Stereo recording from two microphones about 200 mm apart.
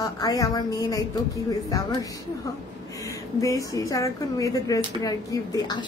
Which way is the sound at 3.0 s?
15° left (ahead or behind).